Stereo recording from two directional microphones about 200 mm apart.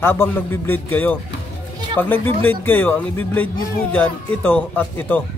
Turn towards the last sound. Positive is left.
turn(degrees=10)  # may be behind; listen again after turning